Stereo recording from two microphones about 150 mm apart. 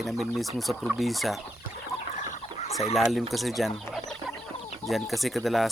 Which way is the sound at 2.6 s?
45° left (ahead or behind).